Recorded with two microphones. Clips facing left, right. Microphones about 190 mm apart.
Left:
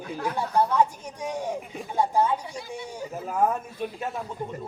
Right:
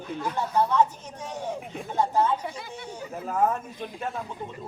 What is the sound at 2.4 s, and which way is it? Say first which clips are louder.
Speech: even; 60° right (ahead or behind).